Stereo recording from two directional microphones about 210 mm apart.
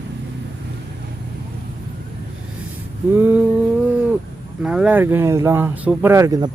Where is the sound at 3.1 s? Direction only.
10° right (ahead or behind).